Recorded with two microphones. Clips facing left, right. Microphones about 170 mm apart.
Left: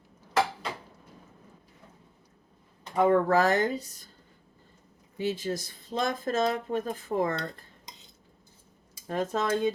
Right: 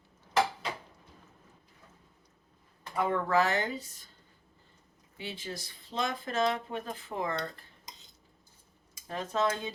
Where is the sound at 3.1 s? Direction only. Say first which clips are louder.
Left 4 dB; 45° left (ahead or behind).